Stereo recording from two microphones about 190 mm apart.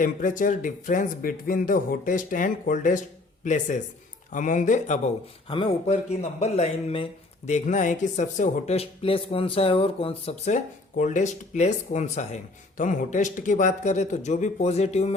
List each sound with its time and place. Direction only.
0.0 s speech: 45° left (ahead or behind)
5.5 s speech: 25° left (ahead or behind)